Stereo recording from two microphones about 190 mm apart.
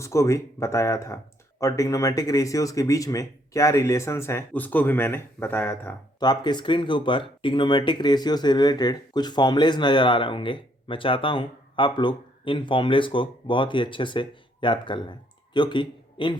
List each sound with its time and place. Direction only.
0.0 s speech: 15° left (ahead or behind)
6.1 s a man's voice: 20° left (ahead or behind)